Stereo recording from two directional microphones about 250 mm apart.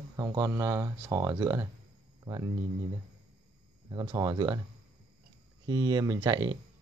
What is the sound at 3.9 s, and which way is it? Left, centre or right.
Speech, centre.